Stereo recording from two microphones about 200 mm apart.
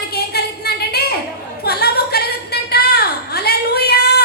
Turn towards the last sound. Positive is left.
turn(degrees=50)  # may be behind; listen again after turning